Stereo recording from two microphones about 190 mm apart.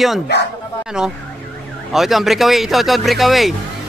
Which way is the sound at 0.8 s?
5° right (ahead or behind).